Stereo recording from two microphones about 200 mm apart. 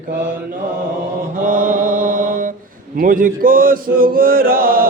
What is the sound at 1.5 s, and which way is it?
Chant, 40° right (ahead or behind).